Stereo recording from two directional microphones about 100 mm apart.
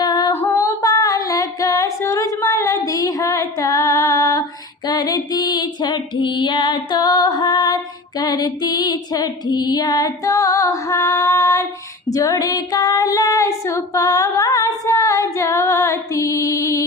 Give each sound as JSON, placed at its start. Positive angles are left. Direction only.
{"t": 0.0, "sound": "music", "side_deg": 45}
{"t": 0.3, "sound": "singing", "side_deg": 25}
{"t": 4.9, "sound": "female singing", "side_deg": 45}